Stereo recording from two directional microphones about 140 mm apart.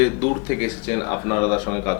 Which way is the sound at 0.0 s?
15° left (ahead or behind).